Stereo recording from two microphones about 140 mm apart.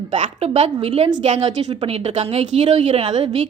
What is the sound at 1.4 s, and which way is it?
Speech, 45° right (ahead or behind).